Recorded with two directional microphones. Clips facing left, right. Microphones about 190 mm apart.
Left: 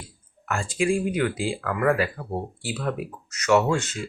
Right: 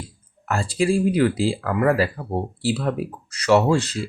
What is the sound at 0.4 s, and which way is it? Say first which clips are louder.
Speech: right 3 dB; 35° right (ahead or behind).